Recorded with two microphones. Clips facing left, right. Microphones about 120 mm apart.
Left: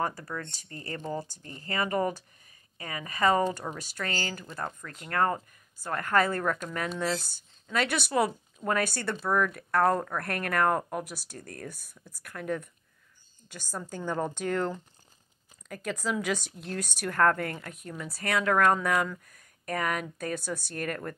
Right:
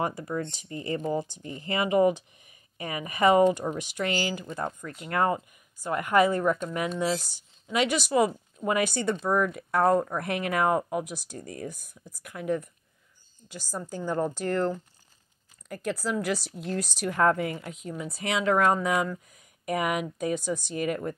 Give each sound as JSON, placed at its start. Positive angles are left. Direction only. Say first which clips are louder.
{"t": 0.0, "sound": "speech", "louder": "right 3 dB", "side_deg": -20}